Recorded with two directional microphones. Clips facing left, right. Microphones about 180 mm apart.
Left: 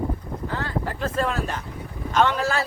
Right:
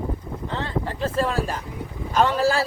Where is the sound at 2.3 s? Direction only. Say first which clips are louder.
Right 4 dB; 30° right (ahead or behind).